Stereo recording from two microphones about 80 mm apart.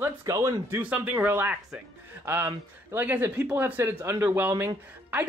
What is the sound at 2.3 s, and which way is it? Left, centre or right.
Speech, right.